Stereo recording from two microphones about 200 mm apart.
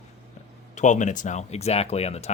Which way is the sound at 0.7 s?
40° left (ahead or behind).